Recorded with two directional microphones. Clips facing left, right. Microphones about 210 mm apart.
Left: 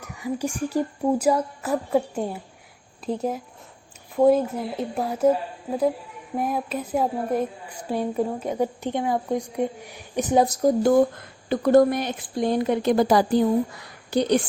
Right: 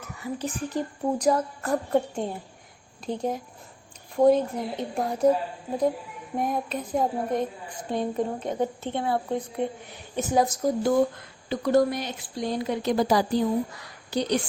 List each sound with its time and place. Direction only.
0.2 s a woman's voice: 15° left (ahead or behind)
6.3 s a woman's voice: 5° left (ahead or behind)
10.4 s speech: 40° left (ahead or behind)
11.4 s a woman's voice: 55° left (ahead or behind)